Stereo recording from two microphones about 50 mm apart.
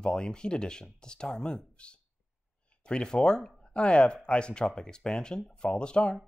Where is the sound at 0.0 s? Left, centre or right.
Centre.